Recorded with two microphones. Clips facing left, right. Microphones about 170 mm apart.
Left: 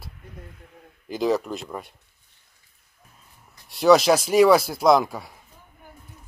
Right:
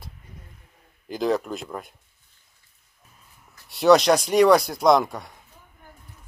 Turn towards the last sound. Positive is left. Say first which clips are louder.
# even
turn(degrees=5)  # may be behind; listen again after turning